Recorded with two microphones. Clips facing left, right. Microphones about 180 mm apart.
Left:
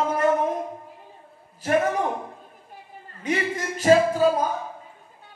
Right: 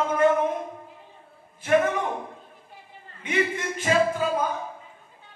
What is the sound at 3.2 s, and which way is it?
A man's voice, 40° left (ahead or behind).